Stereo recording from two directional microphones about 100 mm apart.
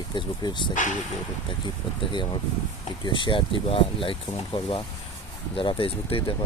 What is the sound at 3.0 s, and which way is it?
Speech, 55° left (ahead or behind).